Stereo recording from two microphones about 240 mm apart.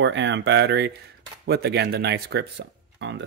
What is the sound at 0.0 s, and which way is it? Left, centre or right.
Speech, right.